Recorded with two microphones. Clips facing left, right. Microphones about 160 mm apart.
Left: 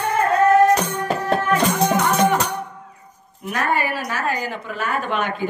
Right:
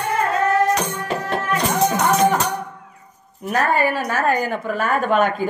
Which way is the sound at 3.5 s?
40° right (ahead or behind).